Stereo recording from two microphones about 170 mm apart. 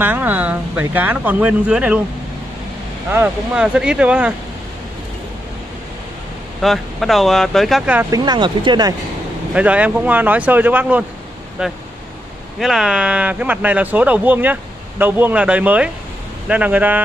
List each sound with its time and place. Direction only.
0.0 s speech: 10° right (ahead or behind)
3.1 s speech: 10° right (ahead or behind)
6.6 s speech: centre (ahead or behind)
8.1 s speech: 25° right (ahead or behind)
9.5 s speech: 10° right (ahead or behind)